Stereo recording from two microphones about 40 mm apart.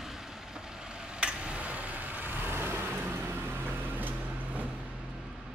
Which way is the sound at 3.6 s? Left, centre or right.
Right.